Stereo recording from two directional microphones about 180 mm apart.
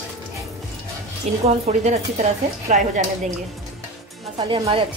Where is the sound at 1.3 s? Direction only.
35° right (ahead or behind).